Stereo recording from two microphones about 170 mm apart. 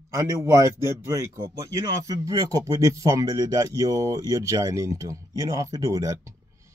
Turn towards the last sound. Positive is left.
turn(degrees=-20)  # may be behind; listen again after turning